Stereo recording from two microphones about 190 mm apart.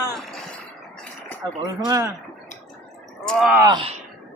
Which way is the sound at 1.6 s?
20° right (ahead or behind).